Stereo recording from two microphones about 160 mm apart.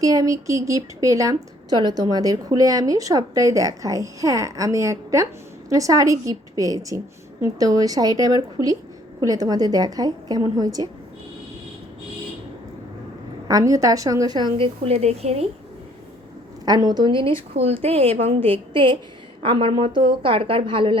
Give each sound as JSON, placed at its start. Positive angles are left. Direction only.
{"t": 0.0, "sound": "a woman's voice", "side_deg": -20}
{"t": 13.5, "sound": "a woman's voice", "side_deg": -20}
{"t": 16.6, "sound": "a woman's voice", "side_deg": -25}